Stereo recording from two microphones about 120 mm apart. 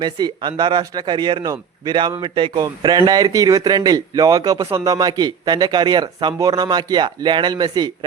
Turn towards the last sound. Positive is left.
turn(degrees=-35)  # may be behind; listen again after turning